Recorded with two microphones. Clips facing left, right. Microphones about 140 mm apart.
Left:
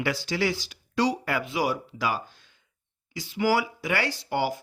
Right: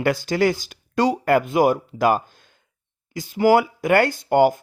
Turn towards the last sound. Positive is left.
turn(degrees=-50)  # may be behind; listen again after turning